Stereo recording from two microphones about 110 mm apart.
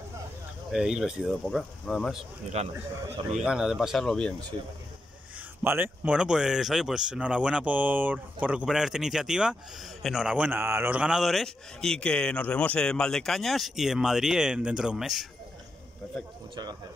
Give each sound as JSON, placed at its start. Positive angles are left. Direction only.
{"t": 0.7, "sound": "speech", "side_deg": -5}
{"t": 2.5, "sound": "speech", "side_deg": -80}
{"t": 3.4, "sound": "speech", "side_deg": -5}
{"t": 5.6, "sound": "speech", "side_deg": -20}